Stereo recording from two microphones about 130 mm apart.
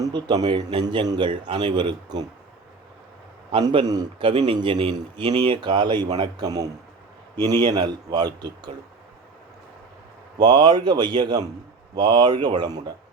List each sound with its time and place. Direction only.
0.0 s a man's voice: 30° right (ahead or behind)
3.5 s a man's voice: 40° right (ahead or behind)
10.3 s a man's voice: 35° right (ahead or behind)